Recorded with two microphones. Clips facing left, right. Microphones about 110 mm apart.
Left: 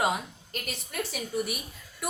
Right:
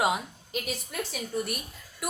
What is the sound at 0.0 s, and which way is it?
A woman's voice, 5° right (ahead or behind).